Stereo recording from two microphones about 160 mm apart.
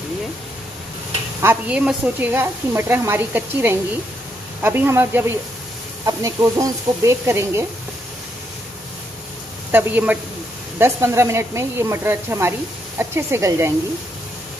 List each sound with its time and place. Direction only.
1.4 s speech: 15° right (ahead or behind)
9.7 s speech: 10° right (ahead or behind)